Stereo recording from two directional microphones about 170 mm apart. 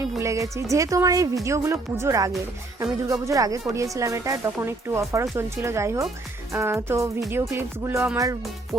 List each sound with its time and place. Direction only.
0.2 s speech: 15° right (ahead or behind)